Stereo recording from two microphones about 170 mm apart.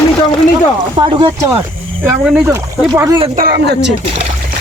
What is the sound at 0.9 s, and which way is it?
Speech, 30° right (ahead or behind).